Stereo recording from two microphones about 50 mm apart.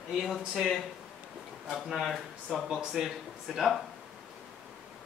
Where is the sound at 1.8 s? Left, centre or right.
Centre.